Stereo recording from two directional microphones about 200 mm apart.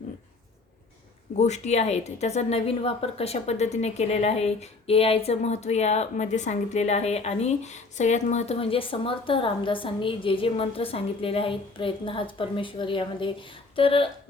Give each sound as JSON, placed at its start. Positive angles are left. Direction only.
{"t": 1.4, "sound": "a woman's voice", "side_deg": 35}